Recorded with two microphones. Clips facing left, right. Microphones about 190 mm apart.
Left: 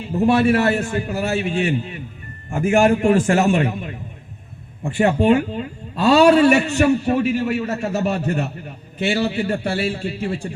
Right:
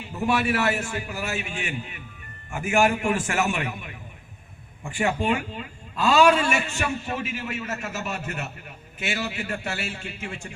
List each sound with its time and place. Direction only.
0.1 s a man's voice: 35° left (ahead or behind)